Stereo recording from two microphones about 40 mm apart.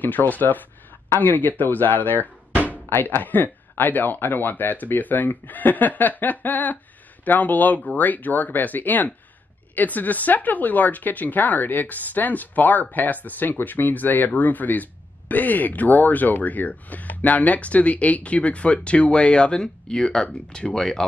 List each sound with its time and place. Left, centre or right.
0.0 s speech: left; by 21.0 s centre